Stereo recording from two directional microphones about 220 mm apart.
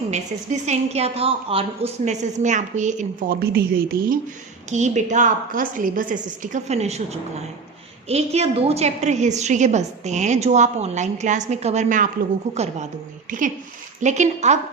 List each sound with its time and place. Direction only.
0.1 s a woman's voice: 30° right (ahead or behind)
4.7 s a woman's voice: 30° right (ahead or behind)
14.0 s a woman's voice: 30° right (ahead or behind)